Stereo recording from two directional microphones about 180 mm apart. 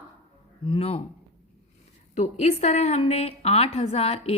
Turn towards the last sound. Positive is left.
turn(degrees=35)  # may be behind; listen again after turning